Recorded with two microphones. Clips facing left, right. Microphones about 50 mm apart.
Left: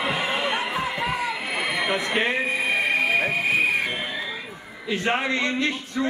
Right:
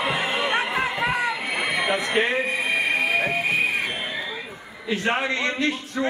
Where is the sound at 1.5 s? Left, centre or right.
Centre.